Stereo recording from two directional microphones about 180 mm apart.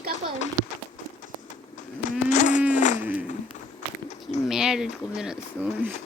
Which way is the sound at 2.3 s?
45° left (ahead or behind).